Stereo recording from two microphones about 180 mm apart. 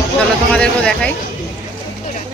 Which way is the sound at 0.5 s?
5° left (ahead or behind).